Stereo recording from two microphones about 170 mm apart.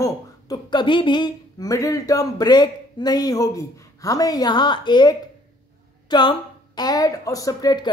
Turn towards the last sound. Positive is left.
turn(degrees=25)  # may be behind; listen again after turning